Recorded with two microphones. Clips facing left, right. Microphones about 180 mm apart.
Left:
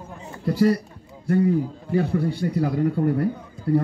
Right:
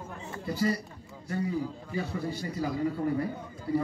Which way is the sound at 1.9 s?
60° left (ahead or behind).